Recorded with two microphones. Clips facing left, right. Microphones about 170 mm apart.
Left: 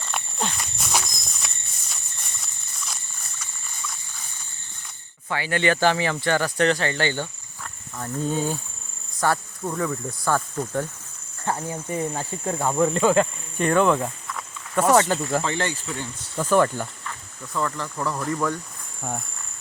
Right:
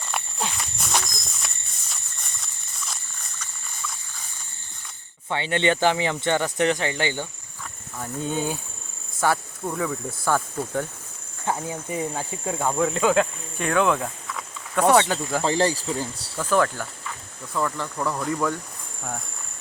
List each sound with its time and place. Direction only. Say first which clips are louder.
0.0 s walk: left 1 dB; 5° right (ahead or behind)
2.4 s a sound: even; centre (ahead or behind)
5.3 s speech: even; 25° right (ahead or behind)
7.6 s speech: left 1 dB; centre (ahead or behind)
15.4 s speech: right 5 dB; 35° right (ahead or behind)
16.4 s speech: left 2 dB; 10° left (ahead or behind)
17.0 s speech: even; 10° right (ahead or behind)